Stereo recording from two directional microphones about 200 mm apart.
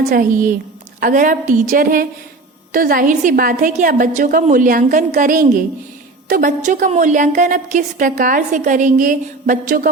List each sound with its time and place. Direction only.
0.1 s a woman's voice: 45° right (ahead or behind)